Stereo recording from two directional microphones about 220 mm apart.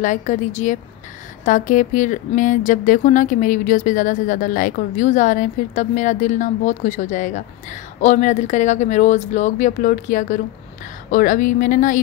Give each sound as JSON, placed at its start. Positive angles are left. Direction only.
{"t": 0.0, "sound": "speech", "side_deg": 35}